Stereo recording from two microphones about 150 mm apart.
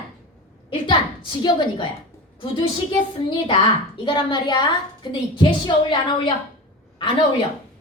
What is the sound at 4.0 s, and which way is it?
A woman's voice, 30° left (ahead or behind).